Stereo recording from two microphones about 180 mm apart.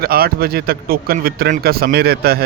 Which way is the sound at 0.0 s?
55° right (ahead or behind).